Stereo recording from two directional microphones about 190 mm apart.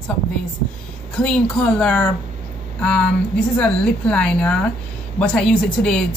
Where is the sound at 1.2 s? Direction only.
5° left (ahead or behind).